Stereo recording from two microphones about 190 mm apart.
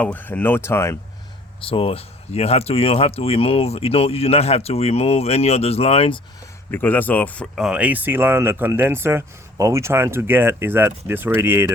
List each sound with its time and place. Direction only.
0.0 s speech: 10° left (ahead or behind)
1.6 s speech: 30° left (ahead or behind)
6.7 s speech: 10° left (ahead or behind); by 11.7 s 10° right (ahead or behind)